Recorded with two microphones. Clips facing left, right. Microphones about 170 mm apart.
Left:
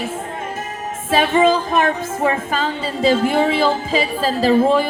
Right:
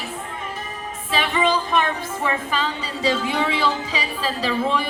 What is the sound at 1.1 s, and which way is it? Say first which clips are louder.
Music: left 7 dB; 45° left (ahead or behind).